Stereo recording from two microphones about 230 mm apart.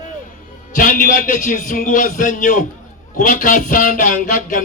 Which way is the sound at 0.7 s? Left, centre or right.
Left.